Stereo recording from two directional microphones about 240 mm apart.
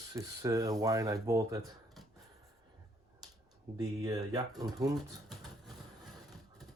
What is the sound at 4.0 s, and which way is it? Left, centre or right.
Speech, centre.